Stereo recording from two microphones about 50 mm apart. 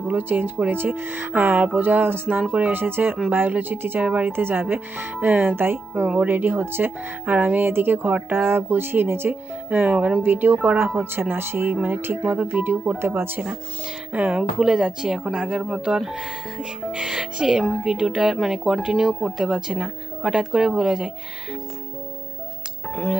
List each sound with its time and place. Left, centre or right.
0.2 s speech: right
2.4 s speech: right
4.0 s speech: right
4.3 s speech: right
5.2 s speech: right
7.7 s speech: right
9.3 s speech: right
10.2 s speech: right
12.2 s speech: right
14.1 s speech: right
14.6 s speech: centre
19.5 s speech: centre